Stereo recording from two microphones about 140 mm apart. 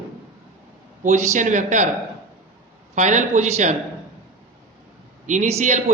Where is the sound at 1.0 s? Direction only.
55° right (ahead or behind).